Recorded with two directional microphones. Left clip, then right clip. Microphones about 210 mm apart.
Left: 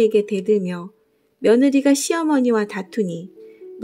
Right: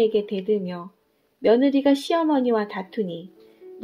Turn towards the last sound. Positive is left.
turn(degrees=55)  # may be behind; listen again after turning